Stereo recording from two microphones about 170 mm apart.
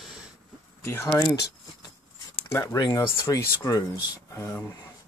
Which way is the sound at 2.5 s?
15° left (ahead or behind).